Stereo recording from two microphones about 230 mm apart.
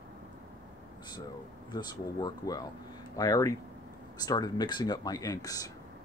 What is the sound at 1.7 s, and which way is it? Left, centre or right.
Speech, centre.